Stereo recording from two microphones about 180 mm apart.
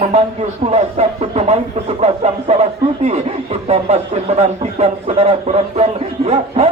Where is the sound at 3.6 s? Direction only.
35° right (ahead or behind).